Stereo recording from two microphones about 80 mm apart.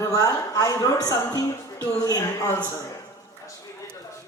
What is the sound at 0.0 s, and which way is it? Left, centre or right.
A man's voice, left.